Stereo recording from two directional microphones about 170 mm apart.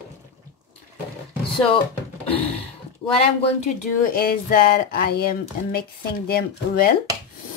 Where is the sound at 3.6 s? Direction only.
60° left (ahead or behind).